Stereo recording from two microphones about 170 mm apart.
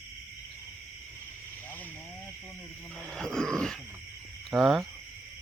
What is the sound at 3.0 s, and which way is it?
Dog, 5° left (ahead or behind).